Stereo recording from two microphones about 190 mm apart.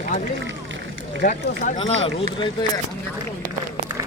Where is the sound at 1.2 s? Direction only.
40° left (ahead or behind).